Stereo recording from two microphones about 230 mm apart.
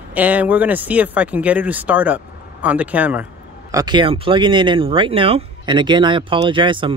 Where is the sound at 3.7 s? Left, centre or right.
Centre.